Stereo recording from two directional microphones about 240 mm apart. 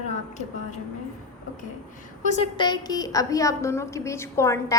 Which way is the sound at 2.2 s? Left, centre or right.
Left.